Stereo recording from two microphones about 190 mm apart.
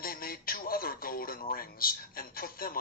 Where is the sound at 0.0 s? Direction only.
50° left (ahead or behind).